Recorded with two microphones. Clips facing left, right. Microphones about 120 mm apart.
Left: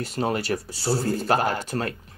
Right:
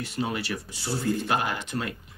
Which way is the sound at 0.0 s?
40° left (ahead or behind).